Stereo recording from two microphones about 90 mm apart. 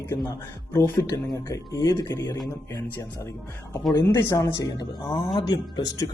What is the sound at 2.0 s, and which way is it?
Speech, 50° left (ahead or behind).